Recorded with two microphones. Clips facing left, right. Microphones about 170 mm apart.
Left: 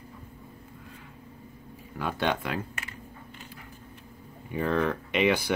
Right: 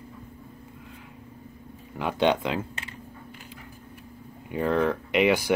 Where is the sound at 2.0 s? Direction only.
20° right (ahead or behind).